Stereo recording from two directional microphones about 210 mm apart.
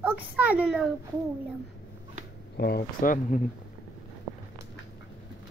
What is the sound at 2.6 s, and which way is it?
Speech, 45° left (ahead or behind).